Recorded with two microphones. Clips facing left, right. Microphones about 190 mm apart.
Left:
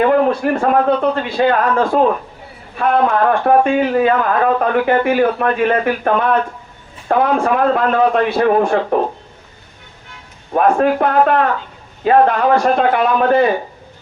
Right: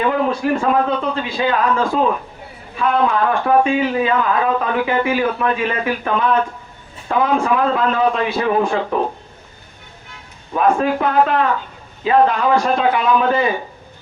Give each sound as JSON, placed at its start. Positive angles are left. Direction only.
{"t": 0.0, "sound": "speech", "side_deg": 50}
{"t": 10.5, "sound": "speech", "side_deg": 50}